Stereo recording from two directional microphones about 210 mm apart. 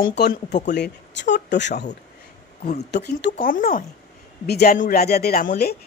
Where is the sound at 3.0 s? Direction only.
50° left (ahead or behind).